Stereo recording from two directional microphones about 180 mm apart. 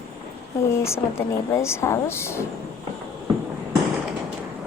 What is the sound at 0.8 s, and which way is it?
Speech, 15° left (ahead or behind).